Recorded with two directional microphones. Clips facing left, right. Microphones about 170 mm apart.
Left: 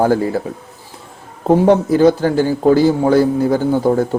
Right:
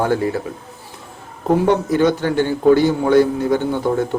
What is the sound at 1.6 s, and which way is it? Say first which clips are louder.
A man's voice: left 5 dB; 35° left (ahead or behind).